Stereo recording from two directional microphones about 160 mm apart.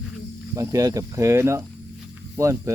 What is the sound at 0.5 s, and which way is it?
Speech, 20° right (ahead or behind).